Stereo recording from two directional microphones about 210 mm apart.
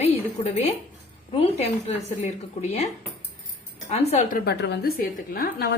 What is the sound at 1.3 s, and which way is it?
A woman's voice, 30° left (ahead or behind).